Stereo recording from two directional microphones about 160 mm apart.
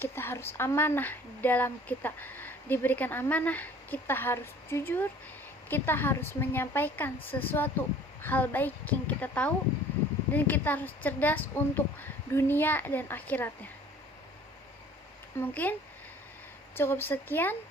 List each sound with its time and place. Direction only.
0.0 s a woman's voice: 15° left (ahead or behind)
15.4 s a woman's voice: 10° left (ahead or behind)
16.7 s a woman's voice: 15° left (ahead or behind)